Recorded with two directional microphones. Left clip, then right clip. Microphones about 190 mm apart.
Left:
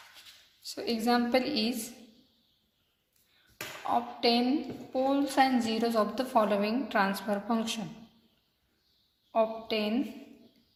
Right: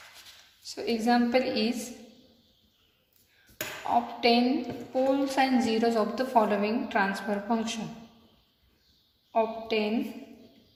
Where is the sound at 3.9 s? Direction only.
25° left (ahead or behind).